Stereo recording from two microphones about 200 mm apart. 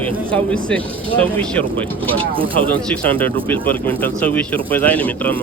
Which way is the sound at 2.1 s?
25° right (ahead or behind).